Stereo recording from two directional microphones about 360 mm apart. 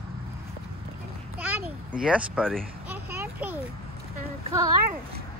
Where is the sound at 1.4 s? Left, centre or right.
Centre.